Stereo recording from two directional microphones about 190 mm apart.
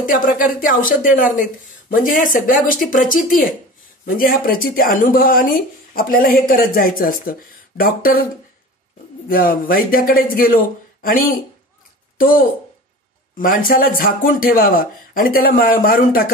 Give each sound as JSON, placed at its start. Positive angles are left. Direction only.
{"t": 0.0, "sound": "speech", "side_deg": 45}
{"t": 9.3, "sound": "speech", "side_deg": 50}